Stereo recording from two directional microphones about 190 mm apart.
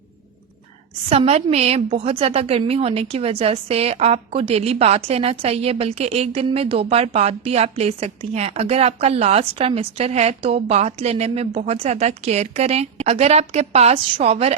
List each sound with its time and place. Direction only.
1.1 s a woman's voice: 30° right (ahead or behind)